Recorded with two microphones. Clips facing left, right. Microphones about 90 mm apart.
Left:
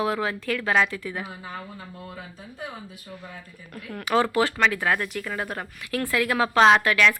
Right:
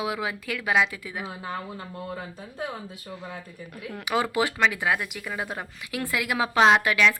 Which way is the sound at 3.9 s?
15° right (ahead or behind).